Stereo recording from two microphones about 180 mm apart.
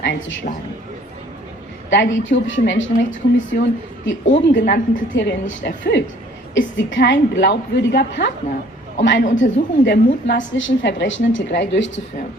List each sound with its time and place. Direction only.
0.0 s a woman's voice: 85° left
1.9 s a woman's voice: 90° left
6.5 s a woman's voice: 90° left
9.4 s a woman's voice: 75° left (ahead or behind)
10.5 s a woman's voice: 90° left